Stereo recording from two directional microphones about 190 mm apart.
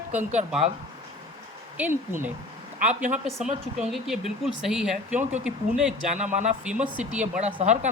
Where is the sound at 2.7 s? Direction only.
45° right (ahead or behind).